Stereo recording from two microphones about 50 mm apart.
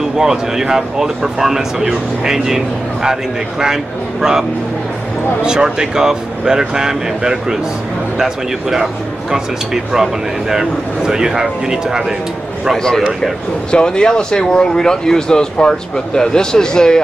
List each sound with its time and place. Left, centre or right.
0.2 s speech: centre
10.5 s speech: centre
12.7 s a man's voice: centre